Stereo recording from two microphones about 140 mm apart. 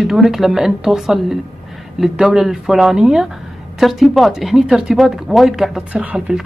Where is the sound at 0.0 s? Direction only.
Centre (ahead or behind).